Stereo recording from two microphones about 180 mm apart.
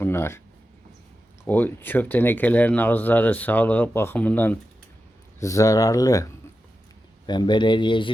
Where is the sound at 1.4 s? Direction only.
10° left (ahead or behind).